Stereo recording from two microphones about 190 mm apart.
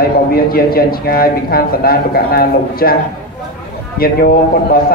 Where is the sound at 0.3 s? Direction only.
50° left (ahead or behind).